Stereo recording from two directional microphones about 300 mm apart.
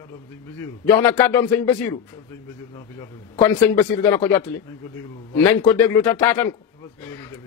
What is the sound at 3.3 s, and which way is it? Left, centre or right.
A man's voice, centre.